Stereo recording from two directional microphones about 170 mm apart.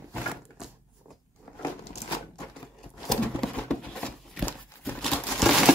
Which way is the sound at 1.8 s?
35° left (ahead or behind).